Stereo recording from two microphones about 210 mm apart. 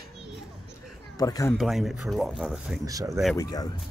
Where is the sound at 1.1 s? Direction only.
15° left (ahead or behind).